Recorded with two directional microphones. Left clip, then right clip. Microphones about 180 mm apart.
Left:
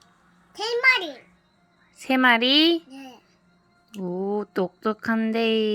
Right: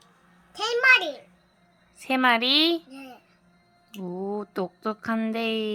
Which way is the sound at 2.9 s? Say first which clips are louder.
Left 1 dB; 20° right (ahead or behind).